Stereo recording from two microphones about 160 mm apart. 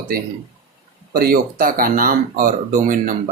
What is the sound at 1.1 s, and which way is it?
Speech, 70° right (ahead or behind).